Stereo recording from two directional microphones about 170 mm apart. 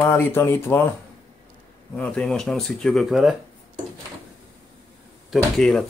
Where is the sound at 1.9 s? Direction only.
5° left (ahead or behind).